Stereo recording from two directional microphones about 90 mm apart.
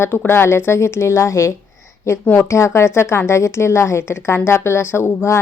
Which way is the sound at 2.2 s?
25° left (ahead or behind).